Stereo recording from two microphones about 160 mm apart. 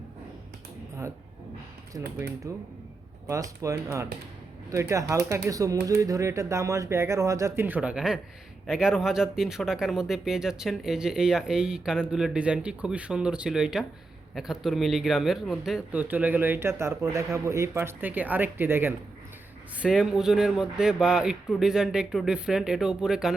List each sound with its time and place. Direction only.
1.9 s speech: 20° right (ahead or behind); by 23.3 s 5° right (ahead or behind)